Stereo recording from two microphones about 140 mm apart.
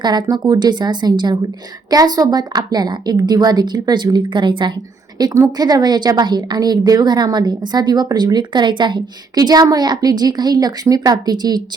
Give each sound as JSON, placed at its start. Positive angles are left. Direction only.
{"t": 0.0, "sound": "a woman's voice", "side_deg": -30}